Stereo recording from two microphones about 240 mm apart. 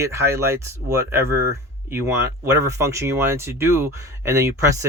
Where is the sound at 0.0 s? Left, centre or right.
Centre.